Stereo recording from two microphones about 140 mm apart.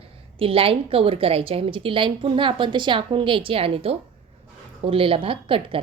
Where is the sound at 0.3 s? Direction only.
40° right (ahead or behind).